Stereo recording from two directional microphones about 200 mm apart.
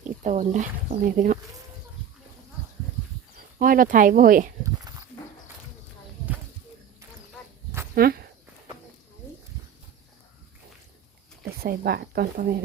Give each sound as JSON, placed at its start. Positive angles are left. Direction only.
{"t": 0.0, "sound": "speech", "side_deg": -35}
{"t": 3.6, "sound": "speech", "side_deg": -45}
{"t": 4.6, "sound": "a sound", "side_deg": -15}
{"t": 8.0, "sound": "speech", "side_deg": -50}
{"t": 11.6, "sound": "speech", "side_deg": -50}